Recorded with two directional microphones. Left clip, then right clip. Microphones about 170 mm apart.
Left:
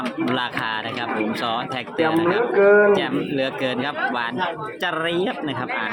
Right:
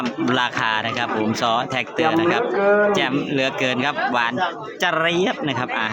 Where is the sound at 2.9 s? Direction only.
30° right (ahead or behind).